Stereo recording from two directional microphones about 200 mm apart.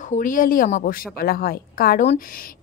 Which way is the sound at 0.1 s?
40° left (ahead or behind).